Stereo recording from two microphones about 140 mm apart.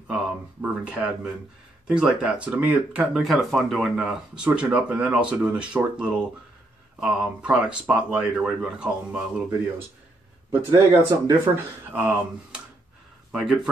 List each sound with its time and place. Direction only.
0.1 s speech: 10° right (ahead or behind)
10.5 s speech: 15° right (ahead or behind)